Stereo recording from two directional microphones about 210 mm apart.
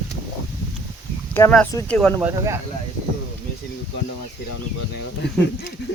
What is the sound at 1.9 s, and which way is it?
Speech, 5° left (ahead or behind).